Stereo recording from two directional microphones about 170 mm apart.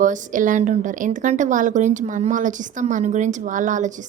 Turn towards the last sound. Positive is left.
turn(degrees=-45)  # may be behind; listen again after turning